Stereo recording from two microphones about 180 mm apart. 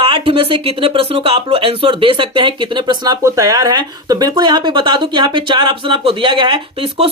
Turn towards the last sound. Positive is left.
turn(degrees=-30)  # may be behind; listen again after turning